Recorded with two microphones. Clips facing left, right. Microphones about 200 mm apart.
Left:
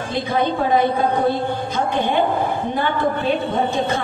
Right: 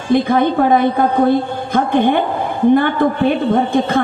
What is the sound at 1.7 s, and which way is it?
Music, 55° right (ahead or behind).